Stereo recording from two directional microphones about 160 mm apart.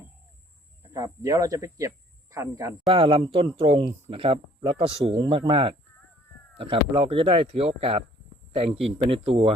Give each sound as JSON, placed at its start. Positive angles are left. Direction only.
{"t": 0.9, "sound": "speech", "side_deg": -20}
{"t": 2.9, "sound": "speech", "side_deg": -35}